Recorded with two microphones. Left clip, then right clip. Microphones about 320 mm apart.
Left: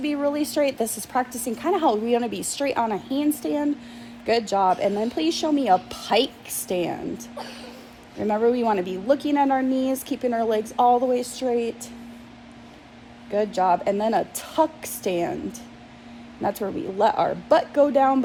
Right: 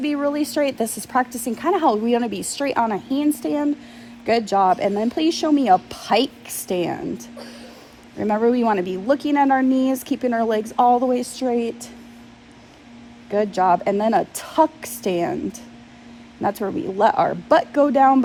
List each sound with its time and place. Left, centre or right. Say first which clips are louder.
0.0 s a woman's voice: right 2 dB; right
13.3 s a woman's voice: right 3 dB; right